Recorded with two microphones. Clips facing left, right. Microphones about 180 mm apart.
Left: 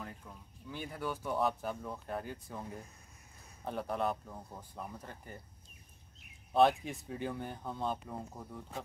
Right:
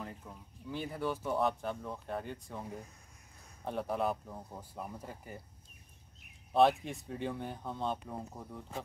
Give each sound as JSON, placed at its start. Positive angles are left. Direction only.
{"t": 0.0, "sound": "speech", "side_deg": -5}
{"t": 6.5, "sound": "speech", "side_deg": 0}